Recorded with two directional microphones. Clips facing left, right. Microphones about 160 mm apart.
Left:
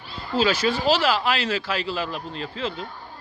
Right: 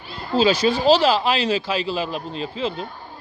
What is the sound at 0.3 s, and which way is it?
Speech, 15° right (ahead or behind).